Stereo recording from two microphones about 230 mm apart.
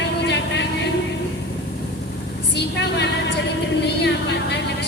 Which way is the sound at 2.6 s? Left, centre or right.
Left.